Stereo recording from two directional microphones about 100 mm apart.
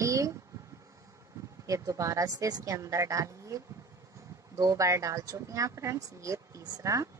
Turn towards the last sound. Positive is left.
turn(degrees=-35)  # may be behind; listen again after turning